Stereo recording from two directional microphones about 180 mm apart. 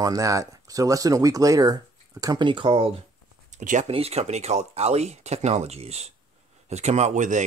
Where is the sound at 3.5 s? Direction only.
45° right (ahead or behind).